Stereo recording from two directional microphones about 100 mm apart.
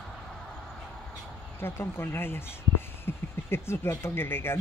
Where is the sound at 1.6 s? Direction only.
25° left (ahead or behind).